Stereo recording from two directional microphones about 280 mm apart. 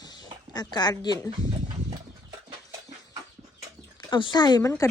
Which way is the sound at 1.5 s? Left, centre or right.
Centre.